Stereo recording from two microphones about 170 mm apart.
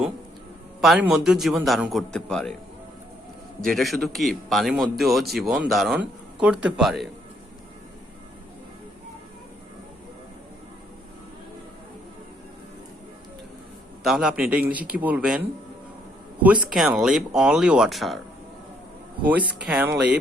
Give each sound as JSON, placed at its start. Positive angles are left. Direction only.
{"t": 0.8, "sound": "a man's voice", "side_deg": -5}
{"t": 3.6, "sound": "a man's voice", "side_deg": 0}
{"t": 14.0, "sound": "a man's voice", "side_deg": -5}
{"t": 19.2, "sound": "speech", "side_deg": -10}